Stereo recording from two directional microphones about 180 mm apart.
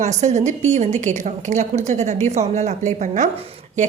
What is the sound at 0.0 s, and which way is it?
A woman's voice, 40° right (ahead or behind).